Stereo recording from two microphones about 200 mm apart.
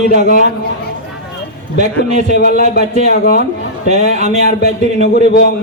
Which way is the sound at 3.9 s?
35° right (ahead or behind).